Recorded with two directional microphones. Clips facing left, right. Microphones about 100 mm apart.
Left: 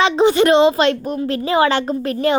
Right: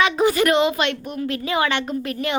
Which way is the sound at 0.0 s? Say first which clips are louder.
Left 4 dB; 25° left (ahead or behind).